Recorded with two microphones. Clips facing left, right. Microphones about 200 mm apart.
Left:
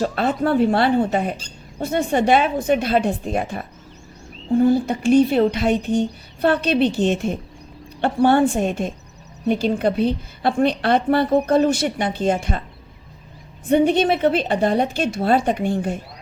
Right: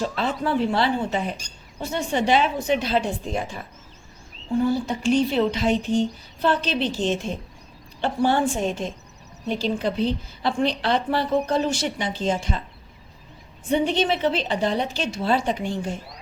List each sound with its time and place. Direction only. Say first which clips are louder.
0.0 s a woman's voice: left 5 dB; 55° left (ahead or behind)
13.7 s a woman's voice: left 5 dB; 55° left (ahead or behind)